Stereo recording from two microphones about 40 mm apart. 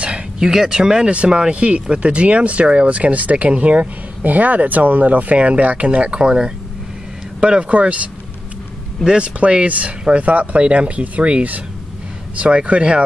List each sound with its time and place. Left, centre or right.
0.4 s speech: centre; by 13.0 s right